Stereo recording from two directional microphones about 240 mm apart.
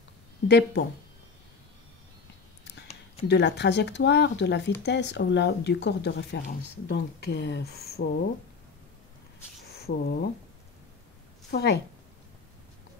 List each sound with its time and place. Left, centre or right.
0.5 s speech: left
3.3 s speech: left
9.8 s speech: left
11.5 s speech: left